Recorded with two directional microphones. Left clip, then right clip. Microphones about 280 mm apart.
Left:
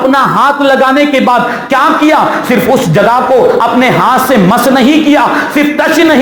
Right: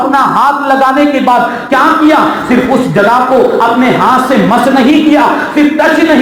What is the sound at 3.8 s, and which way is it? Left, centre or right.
Speech, left.